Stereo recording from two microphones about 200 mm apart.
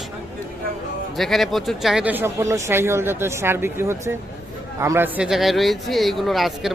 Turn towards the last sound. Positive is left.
turn(degrees=0)  # may be behind; listen again after turning